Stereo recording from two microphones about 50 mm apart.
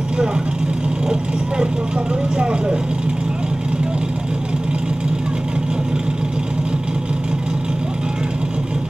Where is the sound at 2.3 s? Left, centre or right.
Centre.